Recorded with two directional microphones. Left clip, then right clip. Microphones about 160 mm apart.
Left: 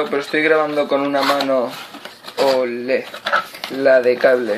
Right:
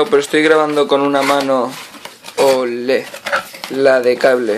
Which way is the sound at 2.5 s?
30° right (ahead or behind).